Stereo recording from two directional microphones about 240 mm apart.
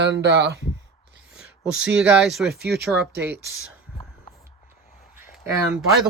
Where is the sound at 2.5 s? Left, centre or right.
Right.